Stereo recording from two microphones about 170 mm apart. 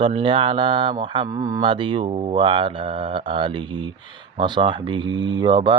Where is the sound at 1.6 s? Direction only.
30° right (ahead or behind).